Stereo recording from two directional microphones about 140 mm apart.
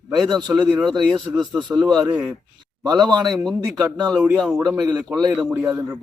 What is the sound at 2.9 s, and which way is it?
Speech, 30° right (ahead or behind).